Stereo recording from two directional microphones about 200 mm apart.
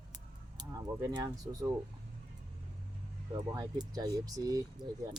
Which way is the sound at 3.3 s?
20° right (ahead or behind).